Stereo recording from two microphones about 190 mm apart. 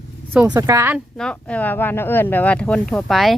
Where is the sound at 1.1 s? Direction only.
5° left (ahead or behind).